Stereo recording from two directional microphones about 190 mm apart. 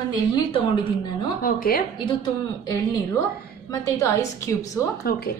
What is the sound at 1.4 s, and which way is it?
Speech, 50° left (ahead or behind).